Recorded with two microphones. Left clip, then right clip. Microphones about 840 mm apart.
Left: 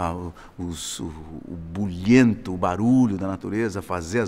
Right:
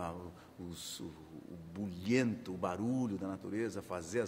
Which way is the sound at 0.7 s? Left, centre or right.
Left.